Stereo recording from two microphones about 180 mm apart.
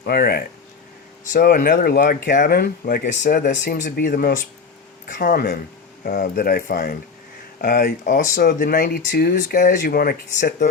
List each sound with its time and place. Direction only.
0.0 s speech: 55° left (ahead or behind)
9.0 s speech: 65° left (ahead or behind)